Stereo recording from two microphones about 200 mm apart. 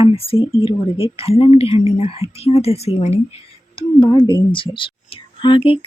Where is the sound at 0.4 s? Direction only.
30° left (ahead or behind).